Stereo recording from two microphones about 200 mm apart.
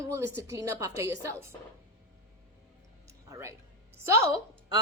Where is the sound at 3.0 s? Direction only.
15° right (ahead or behind).